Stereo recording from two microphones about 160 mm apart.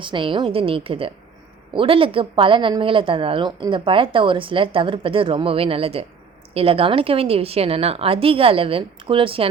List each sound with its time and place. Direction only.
0.0 s a woman's voice: 30° right (ahead or behind)